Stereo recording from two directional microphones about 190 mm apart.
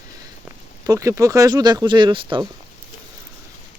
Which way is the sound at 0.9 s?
15° right (ahead or behind).